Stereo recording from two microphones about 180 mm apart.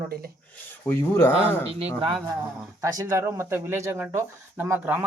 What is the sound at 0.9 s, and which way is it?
Speech, 10° left (ahead or behind).